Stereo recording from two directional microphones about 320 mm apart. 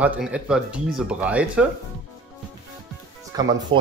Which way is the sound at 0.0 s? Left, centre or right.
Centre.